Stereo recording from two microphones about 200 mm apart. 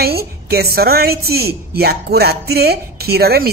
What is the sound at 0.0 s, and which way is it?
A woman's voice, 50° right (ahead or behind).